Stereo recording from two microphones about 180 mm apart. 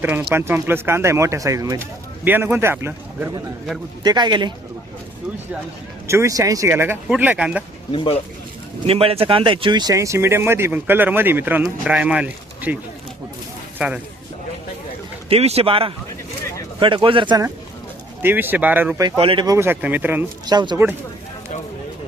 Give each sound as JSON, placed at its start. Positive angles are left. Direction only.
{"t": 0.0, "sound": "speech", "side_deg": -10}
{"t": 6.1, "sound": "speech", "side_deg": -15}
{"t": 7.9, "sound": "speech", "side_deg": 30}
{"t": 8.9, "sound": "speech", "side_deg": -30}
{"t": 15.3, "sound": "speech", "side_deg": -35}
{"t": 18.2, "sound": "speech", "side_deg": -10}
{"t": 19.0, "sound": "speech", "side_deg": -25}
{"t": 19.5, "sound": "speech", "side_deg": -10}
{"t": 20.5, "sound": "speech", "side_deg": -25}